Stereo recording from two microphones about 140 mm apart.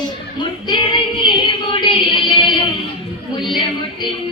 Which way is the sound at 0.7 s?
35° left (ahead or behind).